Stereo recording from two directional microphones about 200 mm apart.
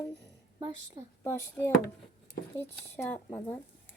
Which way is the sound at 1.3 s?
10° left (ahead or behind).